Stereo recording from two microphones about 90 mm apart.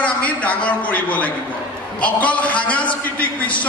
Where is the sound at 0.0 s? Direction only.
15° left (ahead or behind).